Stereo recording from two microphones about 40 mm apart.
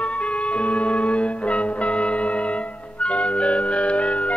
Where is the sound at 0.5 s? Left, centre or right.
Left.